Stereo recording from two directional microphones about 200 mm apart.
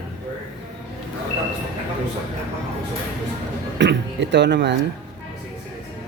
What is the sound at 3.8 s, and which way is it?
Speech, 60° right (ahead or behind).